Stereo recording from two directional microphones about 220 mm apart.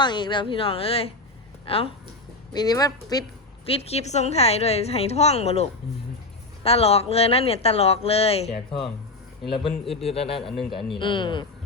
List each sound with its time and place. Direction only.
0.0 s a woman's voice: 20° left (ahead or behind)
3.7 s speech: 30° left (ahead or behind)
6.7 s speech: 25° left (ahead or behind)
10.0 s speech: 25° left (ahead or behind)